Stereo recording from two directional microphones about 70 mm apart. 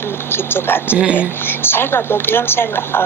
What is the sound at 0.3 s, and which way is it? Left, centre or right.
Speech, left.